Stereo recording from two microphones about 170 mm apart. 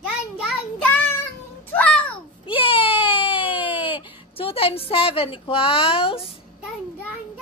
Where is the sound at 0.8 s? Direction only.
10° left (ahead or behind).